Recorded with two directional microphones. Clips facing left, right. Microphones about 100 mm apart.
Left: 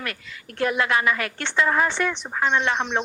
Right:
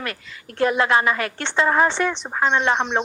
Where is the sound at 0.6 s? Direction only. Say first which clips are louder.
Right 4 dB; 30° right (ahead or behind).